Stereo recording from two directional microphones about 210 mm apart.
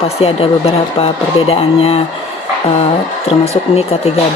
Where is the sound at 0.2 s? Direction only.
30° left (ahead or behind).